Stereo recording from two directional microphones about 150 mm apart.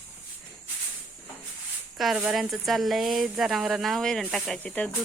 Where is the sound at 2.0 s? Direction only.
5° right (ahead or behind).